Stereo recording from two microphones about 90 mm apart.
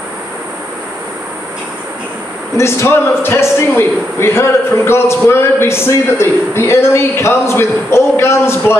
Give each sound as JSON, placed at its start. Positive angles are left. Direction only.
{"t": 2.5, "sound": "a man's voice", "side_deg": 30}